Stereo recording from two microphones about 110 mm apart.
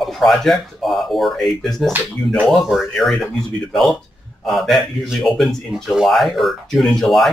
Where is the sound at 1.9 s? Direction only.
15° right (ahead or behind).